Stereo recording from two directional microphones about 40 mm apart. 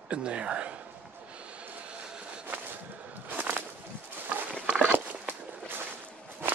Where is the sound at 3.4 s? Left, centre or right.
Right.